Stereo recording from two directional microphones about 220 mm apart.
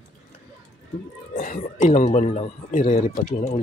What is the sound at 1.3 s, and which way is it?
Speech, 35° left (ahead or behind).